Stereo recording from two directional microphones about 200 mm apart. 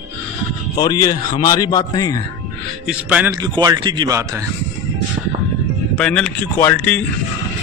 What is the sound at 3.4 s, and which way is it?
Speech, 20° right (ahead or behind).